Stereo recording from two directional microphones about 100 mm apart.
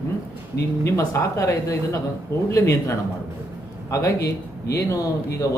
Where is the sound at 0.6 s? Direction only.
30° left (ahead or behind).